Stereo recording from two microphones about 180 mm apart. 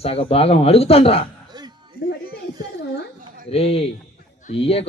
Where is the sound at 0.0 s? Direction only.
35° left (ahead or behind).